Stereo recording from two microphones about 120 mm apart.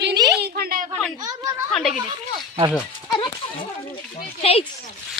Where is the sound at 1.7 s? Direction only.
Centre (ahead or behind).